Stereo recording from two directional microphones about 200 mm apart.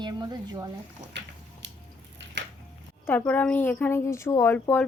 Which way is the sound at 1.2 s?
60° right (ahead or behind).